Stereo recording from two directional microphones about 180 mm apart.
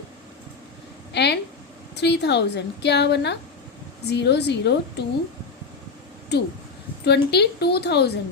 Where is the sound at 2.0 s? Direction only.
70° left (ahead or behind).